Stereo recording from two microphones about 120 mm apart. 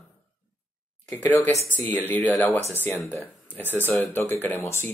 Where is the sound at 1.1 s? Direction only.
20° left (ahead or behind).